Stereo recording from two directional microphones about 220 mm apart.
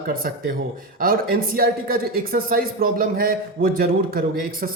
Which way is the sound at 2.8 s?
40° right (ahead or behind).